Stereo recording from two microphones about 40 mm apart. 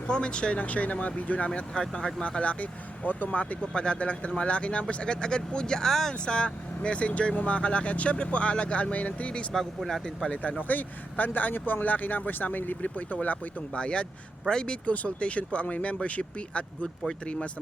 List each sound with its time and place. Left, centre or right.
0.1 s speech: left
0.6 s speech: left
3.6 s speech: left
6.2 s speech: left
9.5 s speech: centre
10.6 s speech: left
13.7 s speech: left